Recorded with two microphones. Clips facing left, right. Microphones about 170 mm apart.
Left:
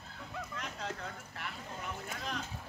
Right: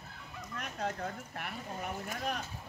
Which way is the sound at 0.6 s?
50° right (ahead or behind).